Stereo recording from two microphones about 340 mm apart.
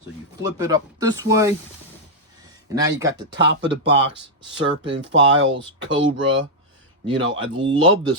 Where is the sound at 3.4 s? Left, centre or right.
Right.